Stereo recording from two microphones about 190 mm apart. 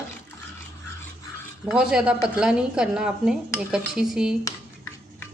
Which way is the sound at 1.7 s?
5° right (ahead or behind).